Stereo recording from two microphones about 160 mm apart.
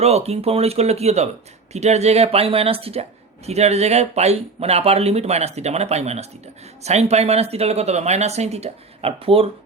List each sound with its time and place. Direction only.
0.0 s speech: 40° right (ahead or behind)